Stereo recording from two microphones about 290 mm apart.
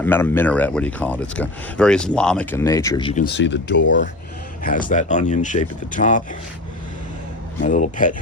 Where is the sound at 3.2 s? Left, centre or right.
Left.